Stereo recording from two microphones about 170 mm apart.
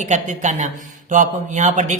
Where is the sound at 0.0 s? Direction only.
45° right (ahead or behind).